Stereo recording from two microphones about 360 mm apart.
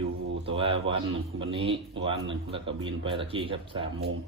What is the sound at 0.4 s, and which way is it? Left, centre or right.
Speech, centre.